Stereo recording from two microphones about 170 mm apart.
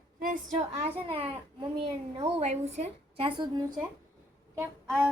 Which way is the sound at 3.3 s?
25° right (ahead or behind).